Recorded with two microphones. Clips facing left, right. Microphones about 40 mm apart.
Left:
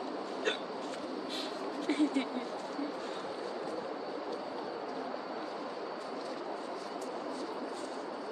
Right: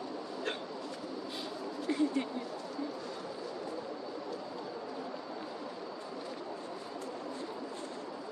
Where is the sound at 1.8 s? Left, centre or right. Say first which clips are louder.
Left 1 dB; left.